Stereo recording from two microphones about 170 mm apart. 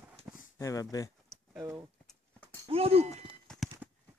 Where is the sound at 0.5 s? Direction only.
20° left (ahead or behind).